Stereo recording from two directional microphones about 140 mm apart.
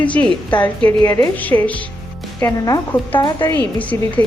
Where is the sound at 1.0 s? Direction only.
20° left (ahead or behind).